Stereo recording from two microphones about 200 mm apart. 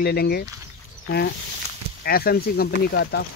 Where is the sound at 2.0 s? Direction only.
50° left (ahead or behind).